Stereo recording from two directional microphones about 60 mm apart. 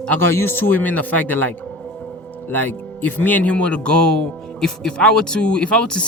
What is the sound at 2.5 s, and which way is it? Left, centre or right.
Speech, left.